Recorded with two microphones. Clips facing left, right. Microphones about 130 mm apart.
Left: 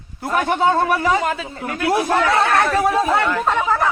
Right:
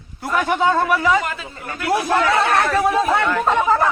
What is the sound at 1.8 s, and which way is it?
A man's voice, 5° left (ahead or behind).